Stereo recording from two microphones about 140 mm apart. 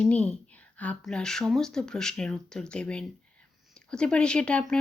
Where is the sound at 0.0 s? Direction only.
10° left (ahead or behind).